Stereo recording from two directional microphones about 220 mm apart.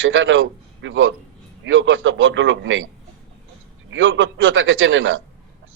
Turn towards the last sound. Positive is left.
turn(degrees=-60)  # may be behind; listen again after turning